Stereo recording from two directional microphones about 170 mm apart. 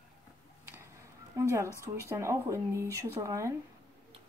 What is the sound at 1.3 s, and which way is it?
Speech, 15° right (ahead or behind).